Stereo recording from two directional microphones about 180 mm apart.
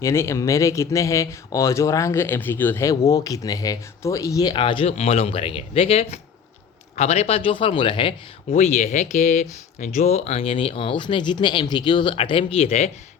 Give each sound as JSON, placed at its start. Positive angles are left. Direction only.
{"t": 0.0, "sound": "speech", "side_deg": 15}
{"t": 8.5, "sound": "speech", "side_deg": 40}